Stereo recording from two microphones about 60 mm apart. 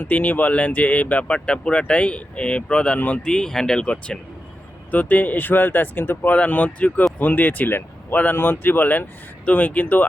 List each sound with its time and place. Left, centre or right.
0.0 s speech: left
3.3 s speech: centre; by 10.1 s left